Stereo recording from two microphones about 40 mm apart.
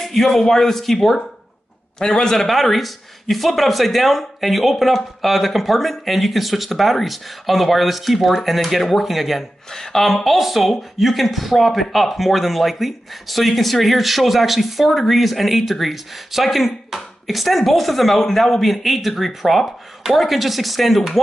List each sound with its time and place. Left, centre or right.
0.0 s speech: centre
2.0 s speech: centre
2.4 s speech: centre
9.7 s speech: centre